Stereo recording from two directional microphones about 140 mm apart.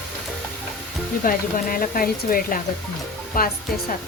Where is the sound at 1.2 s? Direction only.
85° left.